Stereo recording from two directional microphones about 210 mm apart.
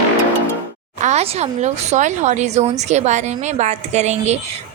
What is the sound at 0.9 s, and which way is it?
A woman's voice, 35° right (ahead or behind).